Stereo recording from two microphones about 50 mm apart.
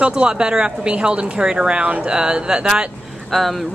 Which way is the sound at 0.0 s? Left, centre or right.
Centre.